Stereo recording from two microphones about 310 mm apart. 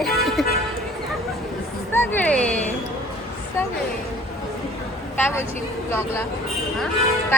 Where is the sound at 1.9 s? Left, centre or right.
Centre.